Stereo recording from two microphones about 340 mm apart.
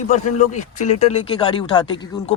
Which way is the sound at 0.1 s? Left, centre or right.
Left.